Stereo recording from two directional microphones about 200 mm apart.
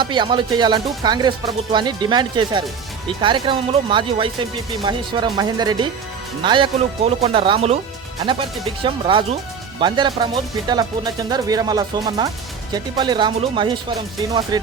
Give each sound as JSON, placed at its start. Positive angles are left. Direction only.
{"t": 0.0, "sound": "speech", "side_deg": -25}
{"t": 8.8, "sound": "speech", "side_deg": -25}